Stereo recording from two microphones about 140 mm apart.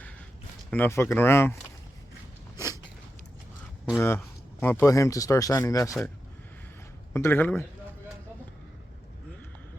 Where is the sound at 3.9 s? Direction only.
15° left (ahead or behind).